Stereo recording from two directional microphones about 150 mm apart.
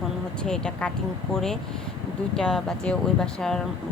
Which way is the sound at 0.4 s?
5° left (ahead or behind).